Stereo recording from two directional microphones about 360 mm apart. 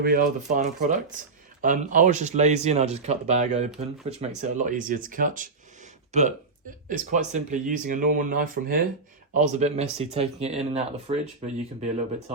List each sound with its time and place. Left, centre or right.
0.0 s speech: right